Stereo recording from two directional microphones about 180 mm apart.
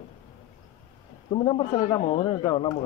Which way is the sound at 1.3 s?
30° left (ahead or behind).